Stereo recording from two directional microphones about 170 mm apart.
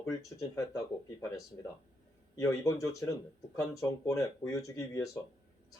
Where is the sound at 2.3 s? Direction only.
20° left (ahead or behind).